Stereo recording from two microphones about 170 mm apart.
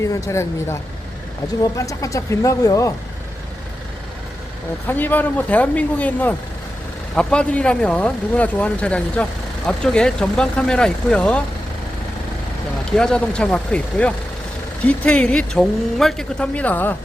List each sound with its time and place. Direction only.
0.0 s speech: 15° left (ahead or behind)
4.9 s speech: 10° left (ahead or behind)
13.0 s speech: 5° left (ahead or behind)